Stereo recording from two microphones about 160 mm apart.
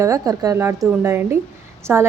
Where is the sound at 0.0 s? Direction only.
20° right (ahead or behind).